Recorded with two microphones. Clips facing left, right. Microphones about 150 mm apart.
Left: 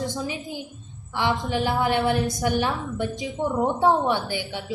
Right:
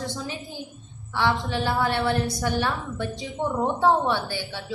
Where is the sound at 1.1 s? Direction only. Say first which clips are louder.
Even; 15° left (ahead or behind).